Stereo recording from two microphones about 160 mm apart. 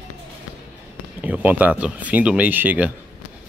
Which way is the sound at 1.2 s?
10° right (ahead or behind).